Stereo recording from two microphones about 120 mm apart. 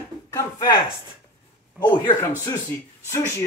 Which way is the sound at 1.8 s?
20° left (ahead or behind).